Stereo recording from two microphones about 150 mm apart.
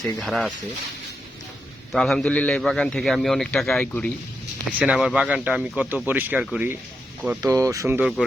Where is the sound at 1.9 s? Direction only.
Centre (ahead or behind).